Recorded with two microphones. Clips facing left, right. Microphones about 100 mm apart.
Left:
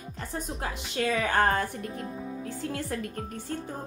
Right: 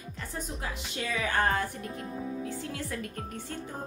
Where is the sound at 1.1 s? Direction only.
40° left (ahead or behind).